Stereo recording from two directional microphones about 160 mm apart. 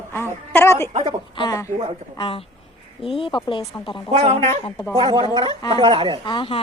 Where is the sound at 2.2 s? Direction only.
35° left (ahead or behind).